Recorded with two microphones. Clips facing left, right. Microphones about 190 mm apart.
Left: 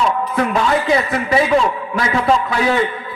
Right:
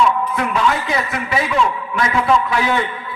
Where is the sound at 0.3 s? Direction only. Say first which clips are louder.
Left 2 dB; 35° left (ahead or behind).